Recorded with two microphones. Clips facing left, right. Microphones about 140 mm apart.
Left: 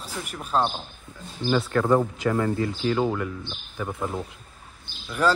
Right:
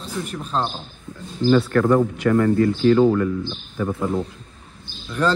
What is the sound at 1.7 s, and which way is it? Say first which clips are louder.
Speech: right 4 dB; 20° left (ahead or behind).